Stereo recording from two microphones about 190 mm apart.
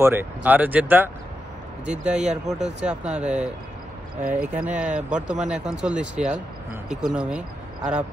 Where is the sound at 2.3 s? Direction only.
5° right (ahead or behind).